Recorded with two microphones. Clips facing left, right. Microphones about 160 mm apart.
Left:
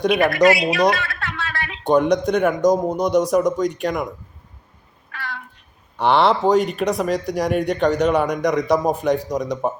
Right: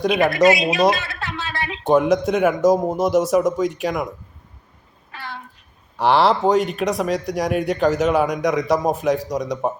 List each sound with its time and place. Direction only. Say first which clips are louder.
0.1 s speech: even; 20° right (ahead or behind)
1.8 s speech: even; 5° right (ahead or behind)
5.1 s a sound: left 1 dB; 25° right (ahead or behind)
6.0 s speech: even; centre (ahead or behind)